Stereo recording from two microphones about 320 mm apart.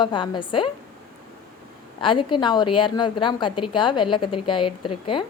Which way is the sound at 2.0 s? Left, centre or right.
Centre.